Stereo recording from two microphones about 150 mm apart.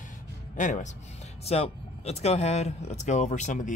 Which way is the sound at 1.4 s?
45° left (ahead or behind).